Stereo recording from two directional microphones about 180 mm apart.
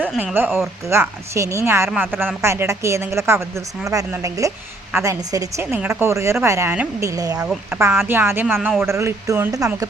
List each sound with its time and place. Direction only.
0.0 s a woman's voice: 5° right (ahead or behind)
7.4 s a woman's voice: 5° right (ahead or behind)